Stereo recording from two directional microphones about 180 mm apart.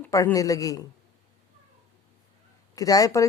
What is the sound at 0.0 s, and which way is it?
Speech, 15° left (ahead or behind).